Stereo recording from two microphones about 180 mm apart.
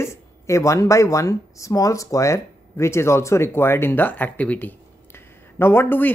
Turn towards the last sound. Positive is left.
turn(degrees=10)  # may be behind; listen again after turning